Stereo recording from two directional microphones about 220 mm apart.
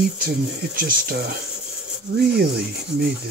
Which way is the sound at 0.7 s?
40° right (ahead or behind).